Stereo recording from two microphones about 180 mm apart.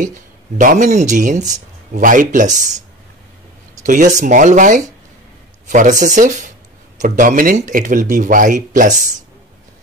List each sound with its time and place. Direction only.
0.6 s speech: 45° right (ahead or behind)
3.8 s speech: 45° right (ahead or behind)